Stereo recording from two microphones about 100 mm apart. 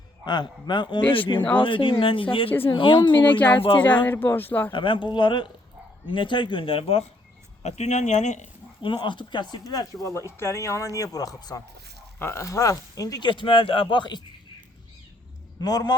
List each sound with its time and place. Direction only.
0.3 s speech: 50° left (ahead or behind)
2.5 s speech: 20° left (ahead or behind)
2.7 s speech: 55° left (ahead or behind)
3.2 s speech: 15° left (ahead or behind)
4.7 s speech: 55° left (ahead or behind); by 7.0 s 70° left (ahead or behind)
7.6 s speech: 90° left
8.8 s speech: 50° left (ahead or behind)
12.2 s speech: 30° left (ahead or behind)
13.2 s speech: 55° left (ahead or behind)
15.6 s speech: 40° left (ahead or behind)